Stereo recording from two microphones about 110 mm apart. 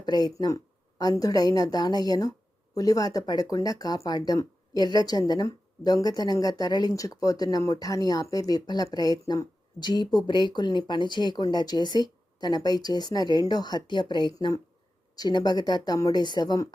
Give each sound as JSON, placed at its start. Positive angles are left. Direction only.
{"t": 0.0, "sound": "speech", "side_deg": 40}